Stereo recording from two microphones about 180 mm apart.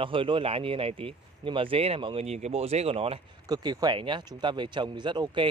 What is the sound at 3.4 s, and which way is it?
Speech, 20° right (ahead or behind).